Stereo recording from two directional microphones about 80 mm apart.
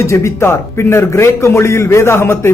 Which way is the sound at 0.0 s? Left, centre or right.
Left.